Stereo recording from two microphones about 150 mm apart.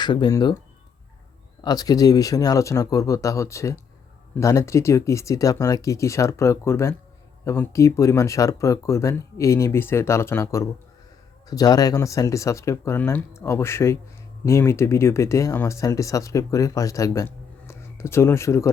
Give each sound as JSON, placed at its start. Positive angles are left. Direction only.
{"t": 0.0, "sound": "speech", "side_deg": 30}
{"t": 1.6, "sound": "speech", "side_deg": 25}